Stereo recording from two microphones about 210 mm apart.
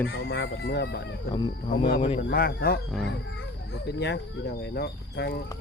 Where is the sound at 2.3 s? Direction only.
45° left (ahead or behind).